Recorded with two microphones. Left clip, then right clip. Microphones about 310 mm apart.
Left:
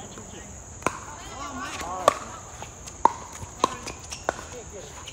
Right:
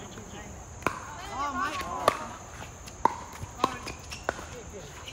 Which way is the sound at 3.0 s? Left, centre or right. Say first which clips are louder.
Left 5 dB; left.